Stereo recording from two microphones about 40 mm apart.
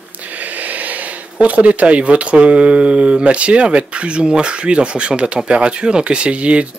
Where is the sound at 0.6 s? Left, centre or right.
Right.